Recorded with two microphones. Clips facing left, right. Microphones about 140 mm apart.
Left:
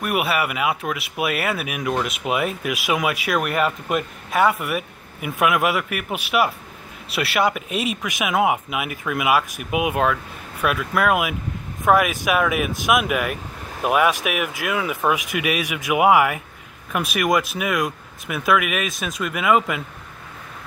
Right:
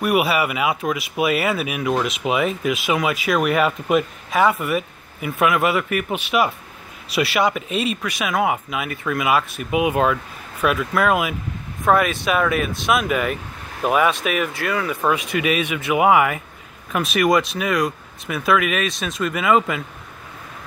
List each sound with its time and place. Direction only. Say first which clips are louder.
0.0 s speech: right 3 dB; centre (ahead or behind)